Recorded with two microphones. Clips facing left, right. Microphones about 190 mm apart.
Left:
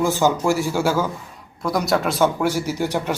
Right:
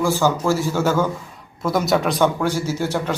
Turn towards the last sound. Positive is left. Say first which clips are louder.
# even
turn(degrees=15)  # may be behind; listen again after turning